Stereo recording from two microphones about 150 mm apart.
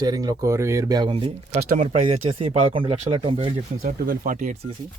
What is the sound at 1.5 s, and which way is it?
Speech, 55° right (ahead or behind).